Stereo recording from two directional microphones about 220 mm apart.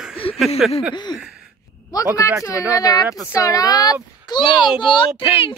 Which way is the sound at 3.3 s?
15° left (ahead or behind).